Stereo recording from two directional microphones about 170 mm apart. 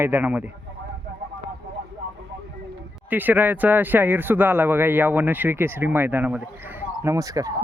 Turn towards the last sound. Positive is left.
turn(degrees=-20)  # may be behind; listen again after turning